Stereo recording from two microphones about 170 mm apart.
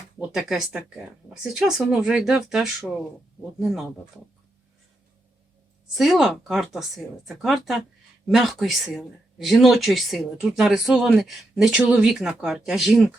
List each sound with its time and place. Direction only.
0.2 s speech: centre (ahead or behind)
5.9 s speech: centre (ahead or behind)